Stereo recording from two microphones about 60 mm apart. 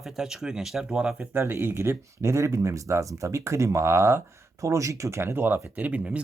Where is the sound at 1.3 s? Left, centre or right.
Right.